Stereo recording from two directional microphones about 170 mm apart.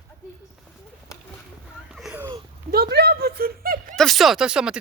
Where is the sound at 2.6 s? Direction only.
65° right (ahead or behind).